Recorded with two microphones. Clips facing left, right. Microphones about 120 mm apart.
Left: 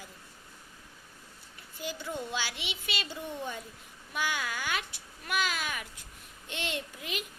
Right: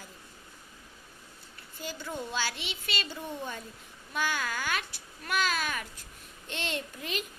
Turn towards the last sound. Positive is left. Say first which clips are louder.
# right 2 dB
turn(degrees=15)  # may be behind; listen again after turning